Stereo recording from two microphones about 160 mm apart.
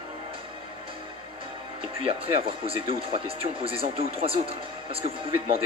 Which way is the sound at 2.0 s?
35° right (ahead or behind).